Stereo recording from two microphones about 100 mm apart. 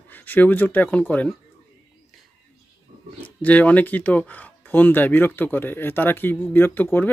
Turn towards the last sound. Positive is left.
turn(degrees=20)  # may be behind; listen again after turning